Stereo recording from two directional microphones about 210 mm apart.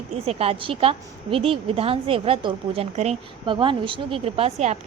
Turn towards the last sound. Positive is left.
turn(degrees=-30)  # may be behind; listen again after turning